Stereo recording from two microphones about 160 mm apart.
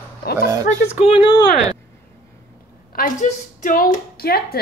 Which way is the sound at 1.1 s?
30° left (ahead or behind).